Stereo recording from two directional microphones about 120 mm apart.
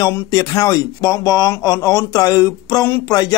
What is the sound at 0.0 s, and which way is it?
A man's voice, 30° left (ahead or behind).